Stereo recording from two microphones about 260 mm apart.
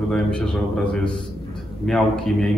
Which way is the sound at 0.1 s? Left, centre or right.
Centre.